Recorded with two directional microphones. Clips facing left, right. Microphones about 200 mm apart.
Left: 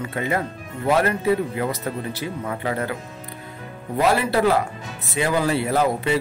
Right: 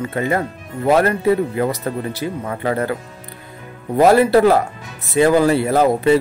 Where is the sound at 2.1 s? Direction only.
45° right (ahead or behind).